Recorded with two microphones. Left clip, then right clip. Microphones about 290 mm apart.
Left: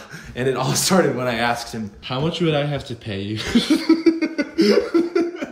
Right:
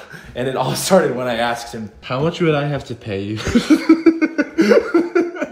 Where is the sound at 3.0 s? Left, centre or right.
Centre.